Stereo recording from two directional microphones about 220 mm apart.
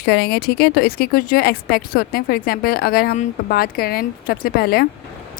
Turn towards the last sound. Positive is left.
turn(degrees=45)  # may be behind; listen again after turning